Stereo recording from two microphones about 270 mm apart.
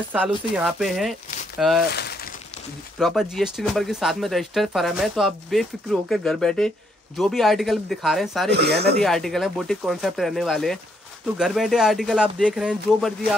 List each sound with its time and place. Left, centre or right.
0.1 s speech: centre
2.0 s a sound: left
3.0 s speech: centre
8.5 s speech: right
9.0 s speech: centre